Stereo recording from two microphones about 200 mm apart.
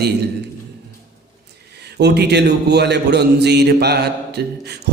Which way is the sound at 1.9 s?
55° right (ahead or behind).